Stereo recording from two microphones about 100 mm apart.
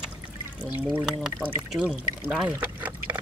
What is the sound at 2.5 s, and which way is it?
Pour, 20° right (ahead or behind).